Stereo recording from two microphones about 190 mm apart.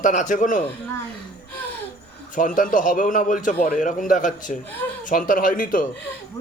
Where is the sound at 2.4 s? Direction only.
45° left (ahead or behind).